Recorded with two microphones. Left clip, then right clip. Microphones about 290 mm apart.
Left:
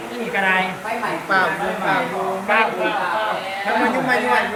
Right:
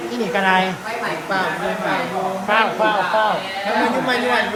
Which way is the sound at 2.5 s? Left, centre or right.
Centre.